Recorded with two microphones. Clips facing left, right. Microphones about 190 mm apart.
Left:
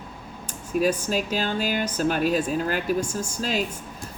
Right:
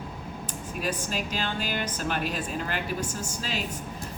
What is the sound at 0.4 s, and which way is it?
Speech, 45° left (ahead or behind).